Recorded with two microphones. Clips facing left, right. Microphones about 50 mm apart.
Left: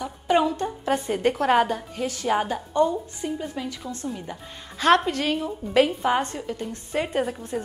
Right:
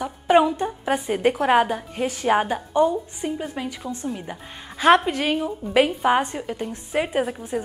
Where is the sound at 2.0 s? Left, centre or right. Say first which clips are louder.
Right 4 dB; right.